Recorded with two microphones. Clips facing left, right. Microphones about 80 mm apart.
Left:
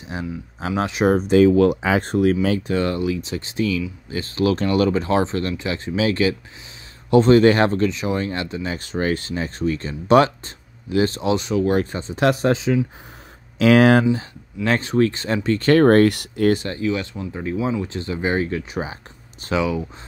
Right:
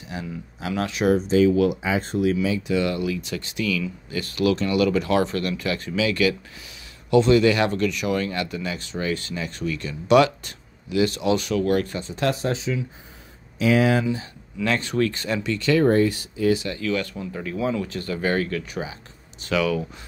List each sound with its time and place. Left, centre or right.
0.1 s speech: left
2.0 s speech: left
8.7 s speech: left
13.6 s speech: left
14.1 s speech: left
16.5 s speech: left
16.8 s speech: left